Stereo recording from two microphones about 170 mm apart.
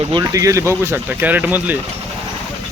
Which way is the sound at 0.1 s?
20° right (ahead or behind).